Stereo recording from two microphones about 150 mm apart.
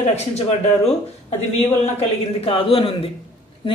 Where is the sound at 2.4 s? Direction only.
40° left (ahead or behind).